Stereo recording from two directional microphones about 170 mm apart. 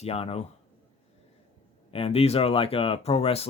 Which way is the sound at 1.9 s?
35° left (ahead or behind).